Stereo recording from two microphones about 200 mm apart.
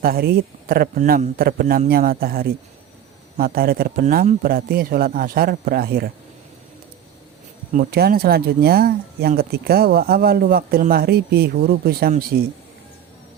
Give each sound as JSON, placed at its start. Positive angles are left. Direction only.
{"t": 0.0, "sound": "speech", "side_deg": -50}
{"t": 7.7, "sound": "speech", "side_deg": -45}